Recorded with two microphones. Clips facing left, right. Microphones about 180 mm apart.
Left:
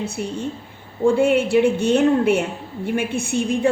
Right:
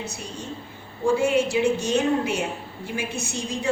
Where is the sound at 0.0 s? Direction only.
55° left (ahead or behind).